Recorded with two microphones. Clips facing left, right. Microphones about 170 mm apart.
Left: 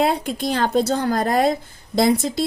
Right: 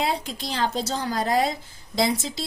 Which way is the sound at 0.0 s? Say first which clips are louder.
Left 7 dB; 55° left (ahead or behind).